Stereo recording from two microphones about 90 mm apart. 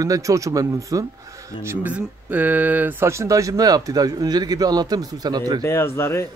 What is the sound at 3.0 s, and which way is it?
A man's voice, 35° right (ahead or behind).